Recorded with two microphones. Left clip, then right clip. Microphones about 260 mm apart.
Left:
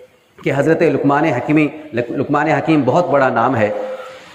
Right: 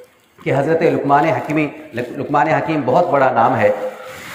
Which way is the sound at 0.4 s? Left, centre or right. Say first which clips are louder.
Left 1 dB; left.